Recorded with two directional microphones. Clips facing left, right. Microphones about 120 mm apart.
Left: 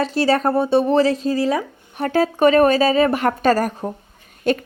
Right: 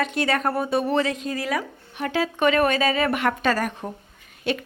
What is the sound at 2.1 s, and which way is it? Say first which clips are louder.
A woman's voice: left 6 dB; 40° left (ahead or behind).